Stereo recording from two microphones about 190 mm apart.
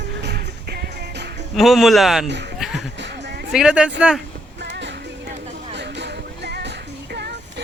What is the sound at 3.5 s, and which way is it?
Speech, 5° right (ahead or behind).